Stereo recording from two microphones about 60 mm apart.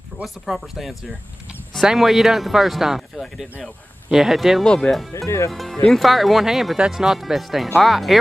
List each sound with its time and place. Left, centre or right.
0.2 s speech: centre
4.6 s speech: centre
5.1 s speech: left
5.5 s speech: centre